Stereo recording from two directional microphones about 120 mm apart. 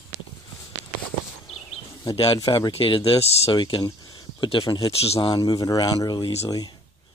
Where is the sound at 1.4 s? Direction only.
60° left (ahead or behind).